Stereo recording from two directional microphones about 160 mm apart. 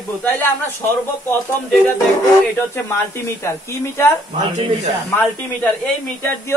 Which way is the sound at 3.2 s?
15° left (ahead or behind).